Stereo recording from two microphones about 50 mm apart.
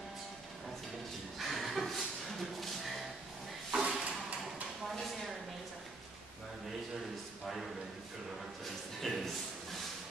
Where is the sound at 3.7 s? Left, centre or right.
Centre.